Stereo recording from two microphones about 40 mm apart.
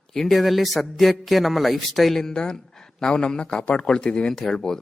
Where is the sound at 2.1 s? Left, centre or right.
Centre.